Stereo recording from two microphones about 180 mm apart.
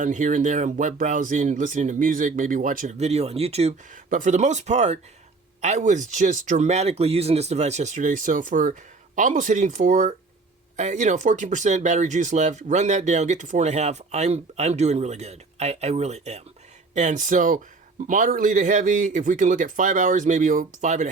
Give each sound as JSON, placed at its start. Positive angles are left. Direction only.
{"t": 0.0, "sound": "speech", "side_deg": -45}